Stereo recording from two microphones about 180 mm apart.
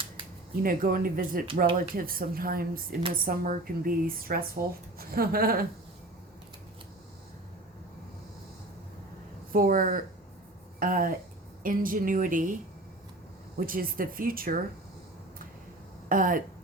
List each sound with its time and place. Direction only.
0.6 s a woman's voice: 50° right (ahead or behind)
9.5 s a woman's voice: 50° right (ahead or behind)
13.6 s a woman's voice: 50° right (ahead or behind)
16.0 s speech: 50° right (ahead or behind)